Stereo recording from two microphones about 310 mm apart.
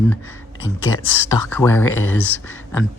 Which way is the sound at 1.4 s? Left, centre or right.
Centre.